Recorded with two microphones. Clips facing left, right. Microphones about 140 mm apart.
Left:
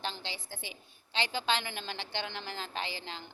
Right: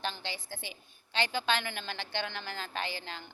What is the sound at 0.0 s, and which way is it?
A woman's voice, 20° left (ahead or behind).